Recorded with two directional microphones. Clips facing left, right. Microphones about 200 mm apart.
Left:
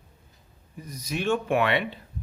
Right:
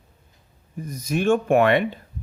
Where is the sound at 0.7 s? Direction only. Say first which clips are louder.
Right 7 dB; 50° right (ahead or behind).